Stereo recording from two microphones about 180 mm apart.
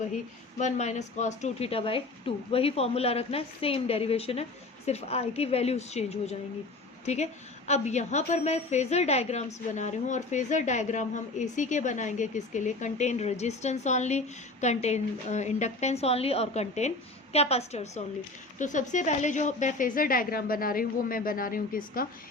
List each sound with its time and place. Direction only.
0.6 s a woman's voice: 40° left (ahead or behind)